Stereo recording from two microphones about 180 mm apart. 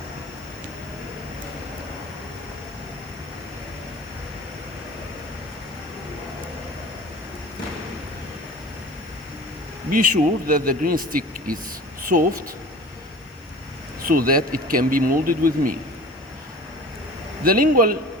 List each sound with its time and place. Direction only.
9.9 s speech: 50° right (ahead or behind)
14.0 s speech: 50° right (ahead or behind)
17.4 s speech: 50° right (ahead or behind)